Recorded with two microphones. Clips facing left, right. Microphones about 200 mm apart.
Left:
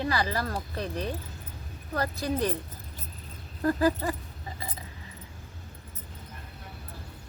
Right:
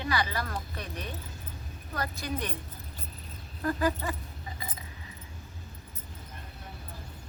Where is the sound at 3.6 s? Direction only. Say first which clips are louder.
Left 4 dB; 35° left (ahead or behind).